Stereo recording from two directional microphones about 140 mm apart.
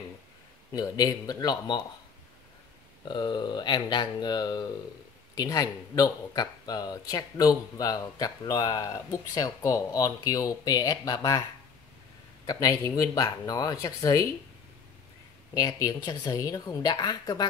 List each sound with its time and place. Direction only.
0.7 s speech: 25° left (ahead or behind)
3.1 s speech: 30° left (ahead or behind)
12.4 s speech: 25° left (ahead or behind)
15.5 s speech: 25° left (ahead or behind)